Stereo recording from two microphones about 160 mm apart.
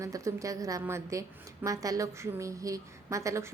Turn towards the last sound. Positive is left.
turn(degrees=-20)  # may be behind; listen again after turning